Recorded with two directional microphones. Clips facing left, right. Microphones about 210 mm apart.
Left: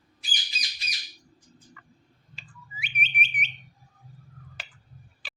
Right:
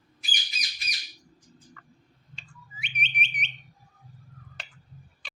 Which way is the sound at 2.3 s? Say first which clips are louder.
Left 2 dB; 5° left (ahead or behind).